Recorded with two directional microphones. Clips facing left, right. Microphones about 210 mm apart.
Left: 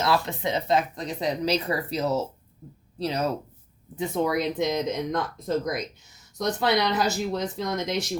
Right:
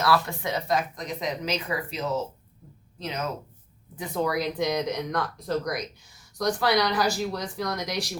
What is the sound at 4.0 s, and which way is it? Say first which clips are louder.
Speech: left 2 dB; 25° left (ahead or behind).